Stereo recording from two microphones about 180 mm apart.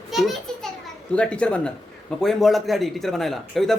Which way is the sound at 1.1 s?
5° left (ahead or behind).